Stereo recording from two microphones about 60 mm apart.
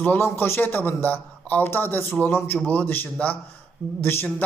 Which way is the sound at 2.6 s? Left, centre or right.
Left.